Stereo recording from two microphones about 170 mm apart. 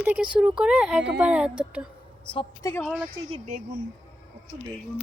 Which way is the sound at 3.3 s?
45° right (ahead or behind).